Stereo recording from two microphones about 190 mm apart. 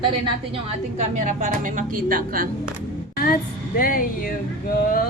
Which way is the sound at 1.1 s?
40° right (ahead or behind).